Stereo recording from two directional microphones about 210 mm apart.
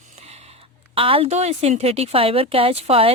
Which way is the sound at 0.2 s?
30° right (ahead or behind).